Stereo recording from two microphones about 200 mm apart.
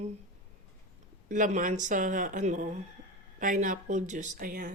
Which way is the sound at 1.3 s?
40° right (ahead or behind).